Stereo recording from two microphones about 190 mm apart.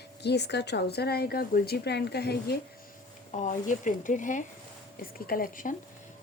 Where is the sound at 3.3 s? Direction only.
40° left (ahead or behind).